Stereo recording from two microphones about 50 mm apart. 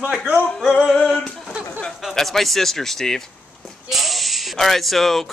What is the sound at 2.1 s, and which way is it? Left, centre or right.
Speech, centre.